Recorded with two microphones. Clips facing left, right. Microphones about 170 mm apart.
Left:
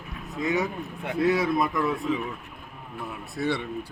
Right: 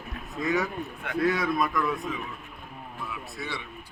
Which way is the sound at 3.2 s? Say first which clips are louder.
Left 9 dB; 60° left (ahead or behind).